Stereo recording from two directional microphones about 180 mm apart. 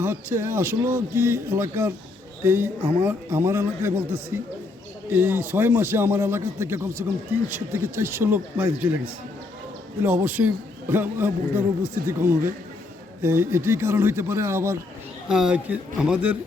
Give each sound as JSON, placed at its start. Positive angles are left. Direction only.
{"t": 0.0, "sound": "a man's voice", "side_deg": -15}
{"t": 10.0, "sound": "a man's voice", "side_deg": -10}
{"t": 15.3, "sound": "speech", "side_deg": -5}